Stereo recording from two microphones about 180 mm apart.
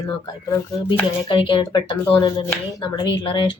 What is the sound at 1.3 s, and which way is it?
Speech, 25° left (ahead or behind).